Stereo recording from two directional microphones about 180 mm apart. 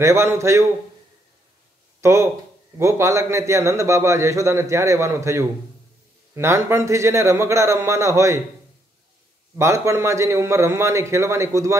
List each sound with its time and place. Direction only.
0.0 s a man's voice: 15° right (ahead or behind)
2.0 s a sound: 15° right (ahead or behind)
2.8 s a man's voice: 15° right (ahead or behind)
9.6 s a man's voice: 15° right (ahead or behind)